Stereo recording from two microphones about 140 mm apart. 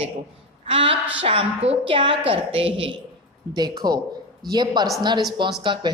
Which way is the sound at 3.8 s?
30° right (ahead or behind).